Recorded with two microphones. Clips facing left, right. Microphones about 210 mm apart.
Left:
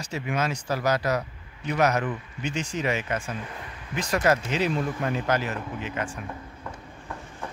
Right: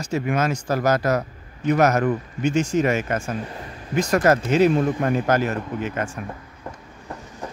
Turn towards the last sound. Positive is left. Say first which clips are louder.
# right 3 dB
turn(degrees=-40)  # may be behind; listen again after turning